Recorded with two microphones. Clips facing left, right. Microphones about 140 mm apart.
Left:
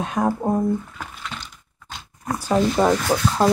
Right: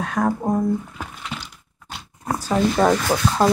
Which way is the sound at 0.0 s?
20° left (ahead or behind).